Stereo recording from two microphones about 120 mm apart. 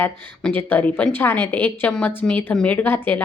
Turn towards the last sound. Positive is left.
turn(degrees=15)  # may be behind; listen again after turning